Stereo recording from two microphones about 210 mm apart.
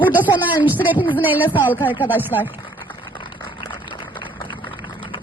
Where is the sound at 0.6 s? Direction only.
10° right (ahead or behind).